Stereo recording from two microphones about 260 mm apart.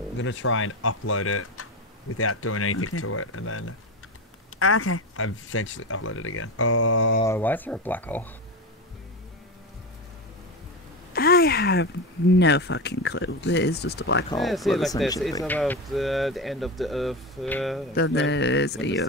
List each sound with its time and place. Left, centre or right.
0.2 s speech: left
7.2 s speech: centre
11.1 s speech: left
14.4 s speech: centre
18.0 s speech: left